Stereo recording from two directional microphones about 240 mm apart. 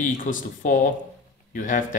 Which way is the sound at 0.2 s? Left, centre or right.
Left.